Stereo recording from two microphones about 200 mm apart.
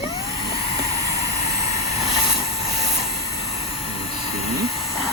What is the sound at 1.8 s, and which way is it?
Vehicle, 30° left (ahead or behind).